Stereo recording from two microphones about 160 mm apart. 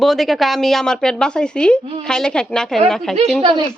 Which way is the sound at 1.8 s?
35° right (ahead or behind).